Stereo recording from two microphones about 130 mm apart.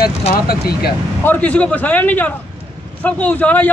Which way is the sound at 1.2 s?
10° left (ahead or behind).